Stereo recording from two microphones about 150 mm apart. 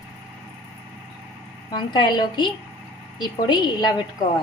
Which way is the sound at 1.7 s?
30° left (ahead or behind).